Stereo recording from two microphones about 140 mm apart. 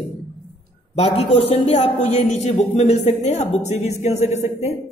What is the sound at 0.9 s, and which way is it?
A man's voice, 45° left (ahead or behind).